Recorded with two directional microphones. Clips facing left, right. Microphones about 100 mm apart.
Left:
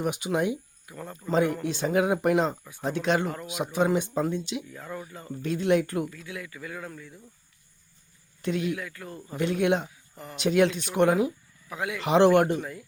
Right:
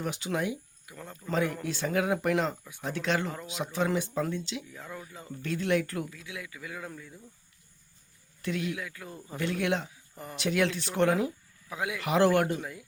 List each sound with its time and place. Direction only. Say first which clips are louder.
0.0 s speech: left 5 dB; 15° left (ahead or behind)
0.9 s speech: left 5 dB; 5° left (ahead or behind)
1.3 s speech: left 5 dB; 20° left (ahead or behind)
6.1 s speech: left 3 dB; 5° right (ahead or behind)
8.4 s speech: left 4 dB; 20° left (ahead or behind)
8.7 s a man's voice: left 4 dB; 10° right (ahead or behind)
9.3 s speech: left 5 dB; 20° left (ahead or behind)
11.7 s a man's voice: left 2 dB; 15° right (ahead or behind)
11.9 s speech: left 5 dB; 20° left (ahead or behind)